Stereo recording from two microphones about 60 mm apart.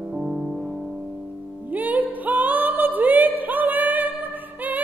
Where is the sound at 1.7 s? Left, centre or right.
Right.